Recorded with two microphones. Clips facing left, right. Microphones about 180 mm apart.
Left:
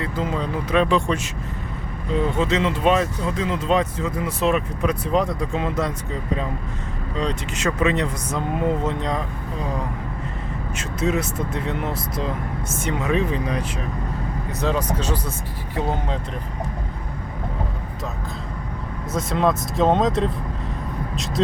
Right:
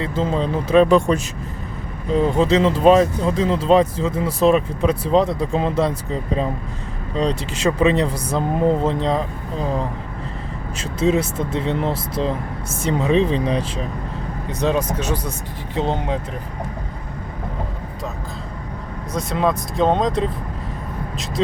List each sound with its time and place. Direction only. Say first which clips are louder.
0.0 s speech: right 4 dB; 25° right (ahead or behind)
0.9 s speech: right 5 dB; 45° right (ahead or behind)
10.8 s speech: right 5 dB; 30° right (ahead or behind)
14.6 s speech: right 3 dB; 20° right (ahead or behind)
19.1 s speech: even; centre (ahead or behind)